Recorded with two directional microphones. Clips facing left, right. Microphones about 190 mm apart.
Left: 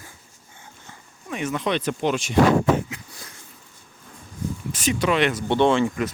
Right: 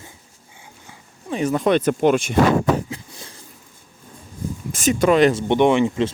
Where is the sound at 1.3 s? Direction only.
35° right (ahead or behind); by 2.4 s 50° right (ahead or behind).